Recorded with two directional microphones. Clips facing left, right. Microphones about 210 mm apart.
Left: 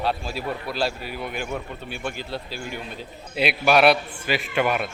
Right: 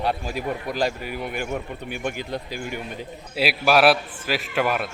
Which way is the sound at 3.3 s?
5° right (ahead or behind).